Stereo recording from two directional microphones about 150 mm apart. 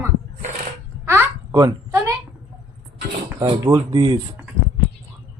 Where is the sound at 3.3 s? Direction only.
25° right (ahead or behind).